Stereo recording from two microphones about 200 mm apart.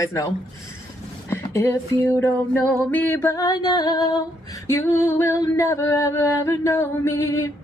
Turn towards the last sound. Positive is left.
turn(degrees=15)  # may be behind; listen again after turning